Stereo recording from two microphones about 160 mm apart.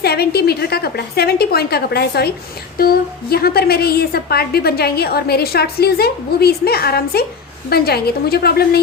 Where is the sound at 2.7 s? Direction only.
70° left (ahead or behind).